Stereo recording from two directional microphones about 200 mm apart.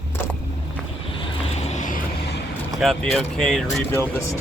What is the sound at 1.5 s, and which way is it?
Vehicle, 35° left (ahead or behind).